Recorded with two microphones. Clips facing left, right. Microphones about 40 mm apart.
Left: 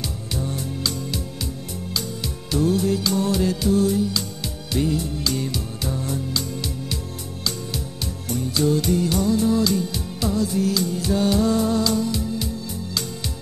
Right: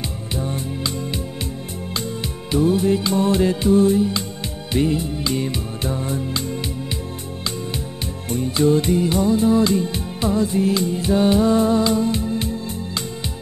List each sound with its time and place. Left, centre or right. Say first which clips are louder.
0.4 s music: right 2 dB; right
2.5 s music: right 3 dB; right
8.3 s music: right 4 dB; right